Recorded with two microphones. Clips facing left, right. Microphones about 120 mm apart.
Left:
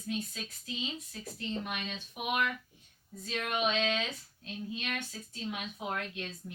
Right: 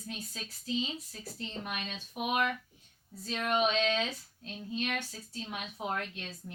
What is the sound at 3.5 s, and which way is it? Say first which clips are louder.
Speech: right 2 dB; 40° right (ahead or behind).